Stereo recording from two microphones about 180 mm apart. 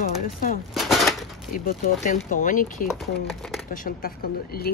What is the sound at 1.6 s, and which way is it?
Speech, 50° left (ahead or behind).